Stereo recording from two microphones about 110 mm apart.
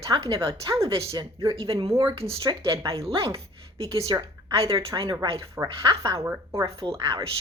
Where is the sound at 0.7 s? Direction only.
60° right (ahead or behind).